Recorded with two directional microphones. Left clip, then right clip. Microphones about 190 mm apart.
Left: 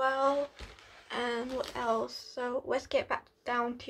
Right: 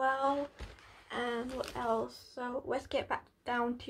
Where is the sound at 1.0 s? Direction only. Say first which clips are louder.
Left 3 dB; 20° left (ahead or behind).